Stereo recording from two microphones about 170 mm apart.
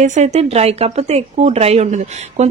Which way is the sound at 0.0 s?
45° right (ahead or behind).